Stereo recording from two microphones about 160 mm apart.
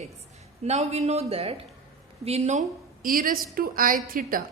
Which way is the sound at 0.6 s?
40° right (ahead or behind).